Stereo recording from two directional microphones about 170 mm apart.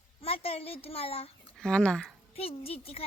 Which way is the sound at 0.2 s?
35° left (ahead or behind).